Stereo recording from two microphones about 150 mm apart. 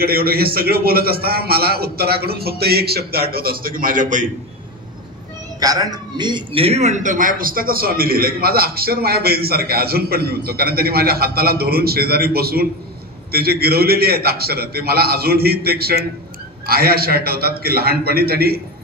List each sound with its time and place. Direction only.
0.0 s speech: 90° right; by 4.3 s 60° right (ahead or behind)
5.6 s speech: 25° right (ahead or behind); by 18.6 s 90° right